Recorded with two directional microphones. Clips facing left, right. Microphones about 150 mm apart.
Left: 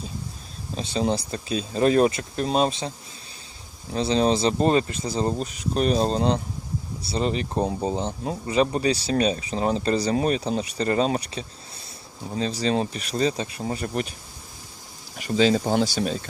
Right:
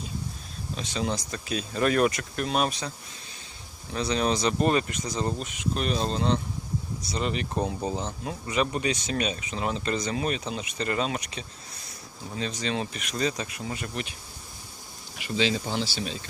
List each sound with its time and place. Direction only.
0.8 s speech: 35° left (ahead or behind)
3.9 s speech: 30° left (ahead or behind)
15.2 s speech: 40° left (ahead or behind)